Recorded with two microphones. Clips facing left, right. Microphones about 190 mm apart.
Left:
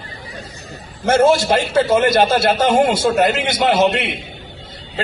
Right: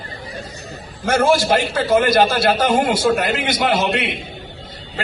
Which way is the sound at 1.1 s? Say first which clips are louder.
Left 2 dB; 25° left (ahead or behind).